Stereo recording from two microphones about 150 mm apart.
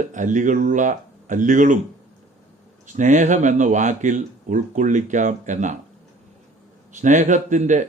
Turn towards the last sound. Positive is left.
turn(degrees=-55)  # may be behind; listen again after turning